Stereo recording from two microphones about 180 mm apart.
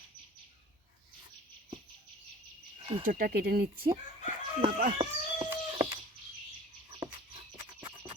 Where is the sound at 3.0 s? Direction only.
55° right (ahead or behind).